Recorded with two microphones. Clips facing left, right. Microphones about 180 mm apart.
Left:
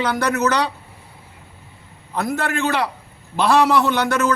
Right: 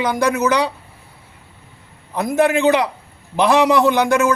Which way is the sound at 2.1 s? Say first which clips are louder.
Right 6 dB; 15° right (ahead or behind).